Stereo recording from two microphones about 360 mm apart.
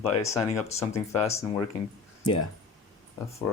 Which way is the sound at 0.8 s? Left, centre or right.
Centre.